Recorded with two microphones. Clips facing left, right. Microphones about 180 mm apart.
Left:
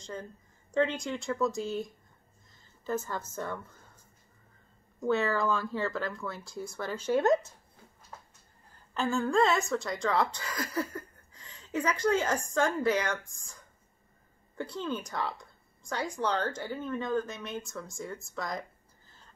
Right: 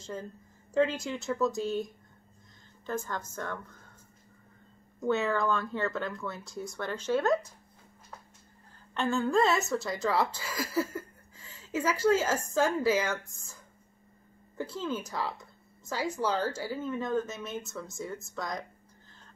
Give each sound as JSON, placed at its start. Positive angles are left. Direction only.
{"t": 0.0, "sound": "speech", "side_deg": -5}
{"t": 3.1, "sound": "a woman's voice", "side_deg": 10}
{"t": 5.0, "sound": "speech", "side_deg": 0}
{"t": 8.9, "sound": "speech", "side_deg": 0}
{"t": 14.6, "sound": "speech", "side_deg": -5}